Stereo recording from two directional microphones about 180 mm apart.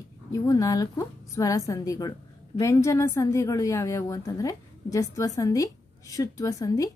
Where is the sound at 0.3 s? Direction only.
20° left (ahead or behind).